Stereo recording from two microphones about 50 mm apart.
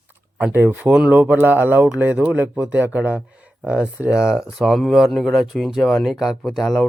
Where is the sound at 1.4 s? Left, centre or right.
Right.